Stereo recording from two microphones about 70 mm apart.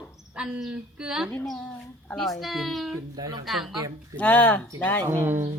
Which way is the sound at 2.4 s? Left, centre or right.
Centre.